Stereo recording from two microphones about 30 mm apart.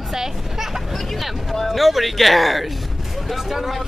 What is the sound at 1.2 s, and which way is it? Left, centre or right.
Speech, centre.